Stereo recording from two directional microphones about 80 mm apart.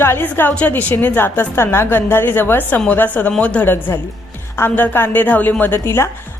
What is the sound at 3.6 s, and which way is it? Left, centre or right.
A woman's voice, left.